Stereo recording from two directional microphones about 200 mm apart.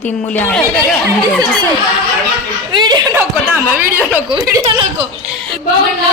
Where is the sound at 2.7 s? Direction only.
20° right (ahead or behind).